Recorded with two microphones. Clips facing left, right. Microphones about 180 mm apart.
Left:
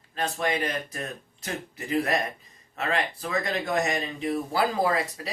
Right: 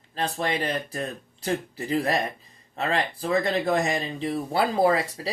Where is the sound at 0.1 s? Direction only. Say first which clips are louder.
Right 1 dB; 30° right (ahead or behind).